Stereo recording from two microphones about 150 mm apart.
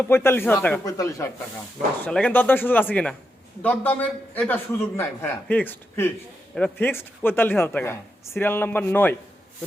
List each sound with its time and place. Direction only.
0.0 s speech: 15° left (ahead or behind)
2.0 s speech: 10° left (ahead or behind)